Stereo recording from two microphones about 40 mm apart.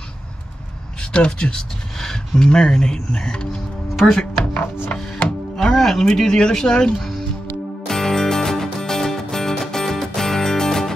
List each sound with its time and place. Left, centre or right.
1.1 s speech: left
4.9 s music: centre
6.0 s speech: centre
7.9 s music: centre